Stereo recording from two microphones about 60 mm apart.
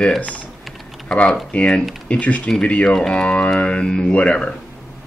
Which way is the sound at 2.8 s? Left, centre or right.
Centre.